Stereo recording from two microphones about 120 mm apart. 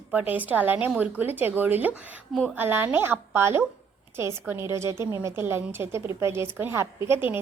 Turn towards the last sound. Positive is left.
turn(degrees=-20)  # may be behind; listen again after turning